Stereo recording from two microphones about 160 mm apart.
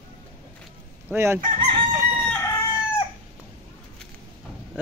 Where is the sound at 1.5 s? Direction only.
35° right (ahead or behind).